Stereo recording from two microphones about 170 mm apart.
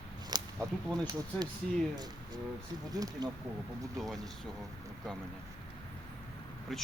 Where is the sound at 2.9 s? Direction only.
20° right (ahead or behind).